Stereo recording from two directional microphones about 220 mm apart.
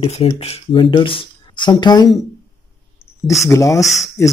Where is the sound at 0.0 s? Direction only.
25° left (ahead or behind).